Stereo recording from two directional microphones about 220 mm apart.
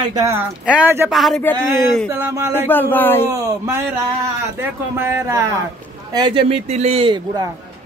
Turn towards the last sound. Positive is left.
turn(degrees=-20)  # may be behind; listen again after turning